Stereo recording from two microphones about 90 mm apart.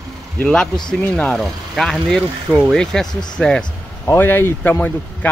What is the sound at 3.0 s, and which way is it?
Speech, 50° left (ahead or behind).